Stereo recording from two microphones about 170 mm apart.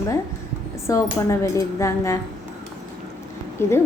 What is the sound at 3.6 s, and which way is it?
Speech, 15° left (ahead or behind).